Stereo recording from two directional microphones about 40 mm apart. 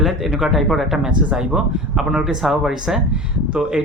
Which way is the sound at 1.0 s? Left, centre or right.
Centre.